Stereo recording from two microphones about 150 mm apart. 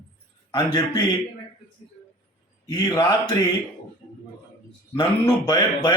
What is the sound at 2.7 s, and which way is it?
Speech, 30° left (ahead or behind).